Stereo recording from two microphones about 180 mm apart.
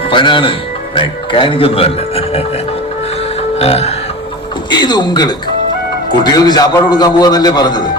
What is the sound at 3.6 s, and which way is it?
Speech, 35° left (ahead or behind).